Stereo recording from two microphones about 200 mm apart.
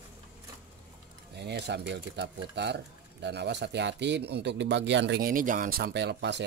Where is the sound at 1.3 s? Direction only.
55° right (ahead or behind).